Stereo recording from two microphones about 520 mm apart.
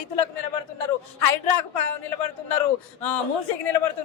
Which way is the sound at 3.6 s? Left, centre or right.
Left.